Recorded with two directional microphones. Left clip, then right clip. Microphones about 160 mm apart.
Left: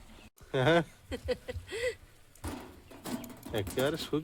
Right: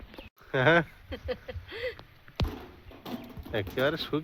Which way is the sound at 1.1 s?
90° left.